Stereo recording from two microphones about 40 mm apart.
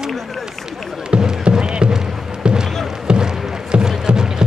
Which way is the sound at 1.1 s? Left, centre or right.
Right.